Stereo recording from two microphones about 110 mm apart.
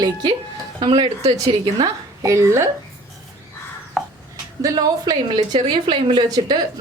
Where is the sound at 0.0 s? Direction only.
40° right (ahead or behind).